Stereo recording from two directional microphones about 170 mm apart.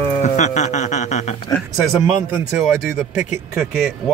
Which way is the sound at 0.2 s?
45° left (ahead or behind).